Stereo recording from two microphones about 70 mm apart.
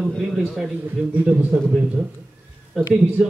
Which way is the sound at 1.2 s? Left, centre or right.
Centre.